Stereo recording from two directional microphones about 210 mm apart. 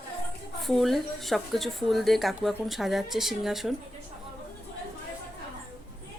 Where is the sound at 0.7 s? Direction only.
Centre (ahead or behind).